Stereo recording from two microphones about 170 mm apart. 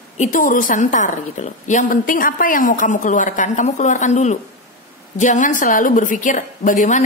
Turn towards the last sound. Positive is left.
turn(degrees=45)  # may be behind; listen again after turning